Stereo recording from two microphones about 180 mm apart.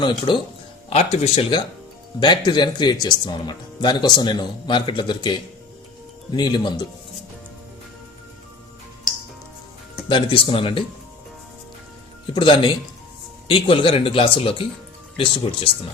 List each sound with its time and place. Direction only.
0.0 s speech: 25° left (ahead or behind)
10.1 s speech: 25° left (ahead or behind)
12.3 s speech: 25° left (ahead or behind)